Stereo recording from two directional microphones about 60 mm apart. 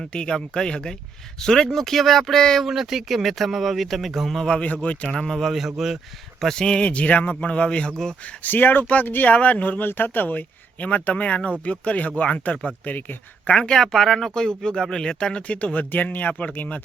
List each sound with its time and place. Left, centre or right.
0.0 s speech: centre
2.6 s speech: centre
4.6 s speech: left
5.1 s speech: centre
6.4 s speech: centre
6.8 s speech: left
8.4 s speech: left
13.6 s speech: centre; by 16.8 s left